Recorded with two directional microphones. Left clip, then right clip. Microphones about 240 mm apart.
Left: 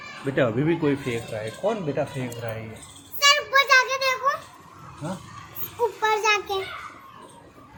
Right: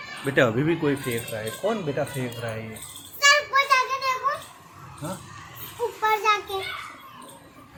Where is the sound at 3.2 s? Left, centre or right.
Left.